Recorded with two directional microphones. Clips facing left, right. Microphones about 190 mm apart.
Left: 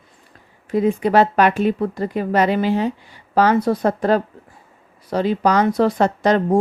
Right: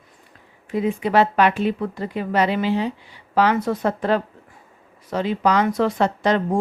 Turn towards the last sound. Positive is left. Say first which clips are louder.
# left 4 dB
turn(degrees=40)  # may be behind; listen again after turning